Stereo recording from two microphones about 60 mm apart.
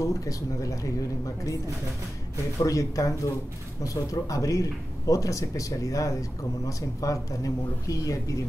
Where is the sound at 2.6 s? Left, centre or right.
Left.